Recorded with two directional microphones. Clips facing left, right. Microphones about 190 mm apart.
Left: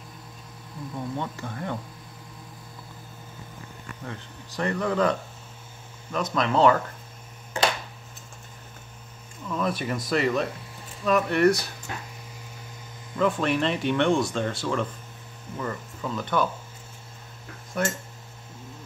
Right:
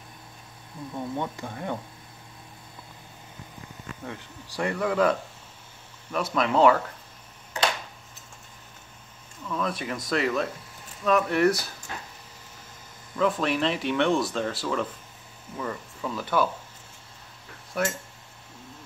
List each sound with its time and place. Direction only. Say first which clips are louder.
0.9 s speech: right 1 dB; 15° right (ahead or behind)
4.0 s speech: left 1 dB; 10° right (ahead or behind)
6.1 s speech: even; 10° right (ahead or behind)
9.5 s speech: left 2 dB; 5° left (ahead or behind)
13.2 s speech: left 1 dB; centre (ahead or behind)
17.8 s speech: even; 5° right (ahead or behind)